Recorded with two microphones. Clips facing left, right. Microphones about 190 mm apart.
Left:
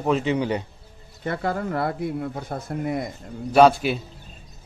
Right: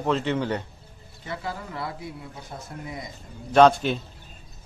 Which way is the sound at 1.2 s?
55° left (ahead or behind).